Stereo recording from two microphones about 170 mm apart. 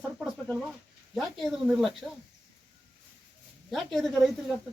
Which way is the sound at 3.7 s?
Centre (ahead or behind).